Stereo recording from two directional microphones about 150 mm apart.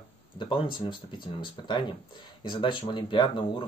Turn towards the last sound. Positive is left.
turn(degrees=35)  # may be behind; listen again after turning